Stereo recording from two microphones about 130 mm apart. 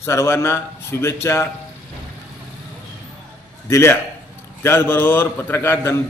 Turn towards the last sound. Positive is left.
turn(degrees=20)  # may be behind; listen again after turning